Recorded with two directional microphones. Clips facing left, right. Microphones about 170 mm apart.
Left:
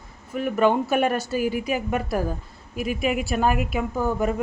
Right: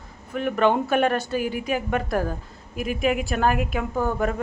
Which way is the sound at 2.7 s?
45° right (ahead or behind).